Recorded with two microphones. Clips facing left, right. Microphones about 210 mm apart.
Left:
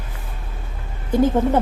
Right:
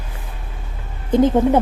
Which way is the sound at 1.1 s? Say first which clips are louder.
Right 3 dB; 20° right (ahead or behind).